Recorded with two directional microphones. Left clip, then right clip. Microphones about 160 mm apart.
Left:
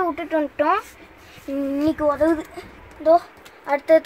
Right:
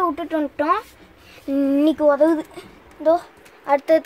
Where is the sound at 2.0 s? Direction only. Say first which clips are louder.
Right 3 dB; 50° right (ahead or behind).